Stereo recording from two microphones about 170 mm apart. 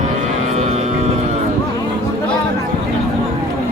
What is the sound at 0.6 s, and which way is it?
Vehicle, 40° right (ahead or behind).